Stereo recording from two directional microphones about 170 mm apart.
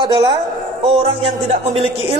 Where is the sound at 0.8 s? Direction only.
35° right (ahead or behind).